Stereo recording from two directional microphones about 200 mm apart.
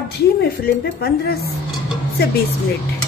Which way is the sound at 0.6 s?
50° left (ahead or behind).